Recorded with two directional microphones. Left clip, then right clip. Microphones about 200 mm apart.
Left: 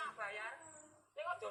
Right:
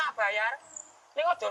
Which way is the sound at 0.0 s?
45° right (ahead or behind).